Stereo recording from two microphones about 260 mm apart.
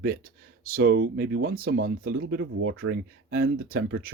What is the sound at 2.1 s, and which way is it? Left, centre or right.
Speech, right.